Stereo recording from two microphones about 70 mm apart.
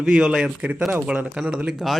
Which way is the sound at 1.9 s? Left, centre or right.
Centre.